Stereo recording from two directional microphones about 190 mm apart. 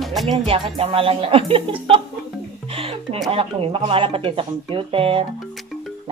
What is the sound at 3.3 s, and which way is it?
Speech, 30° right (ahead or behind).